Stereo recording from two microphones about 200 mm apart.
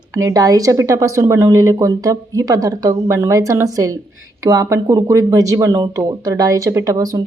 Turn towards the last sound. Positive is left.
turn(degrees=-20)  # may be behind; listen again after turning